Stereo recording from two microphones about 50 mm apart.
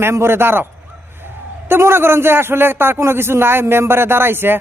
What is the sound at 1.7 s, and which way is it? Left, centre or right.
Speech, right.